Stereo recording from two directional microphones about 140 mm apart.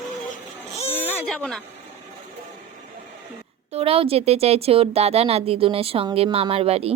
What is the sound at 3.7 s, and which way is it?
Speech, 45° right (ahead or behind).